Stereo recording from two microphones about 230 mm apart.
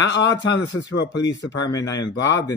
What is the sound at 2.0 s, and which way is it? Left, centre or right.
Speech, left.